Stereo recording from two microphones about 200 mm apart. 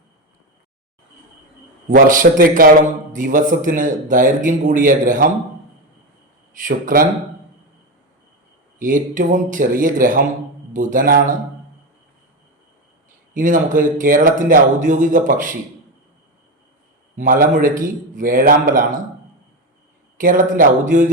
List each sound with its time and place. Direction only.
1.9 s a man's voice: 40° right (ahead or behind)
6.7 s a man's voice: 45° right (ahead or behind)
8.8 s speech: 40° right (ahead or behind)
13.3 s speech: 40° right (ahead or behind)
17.2 s a man's voice: 45° right (ahead or behind)
20.1 s speech: 40° right (ahead or behind)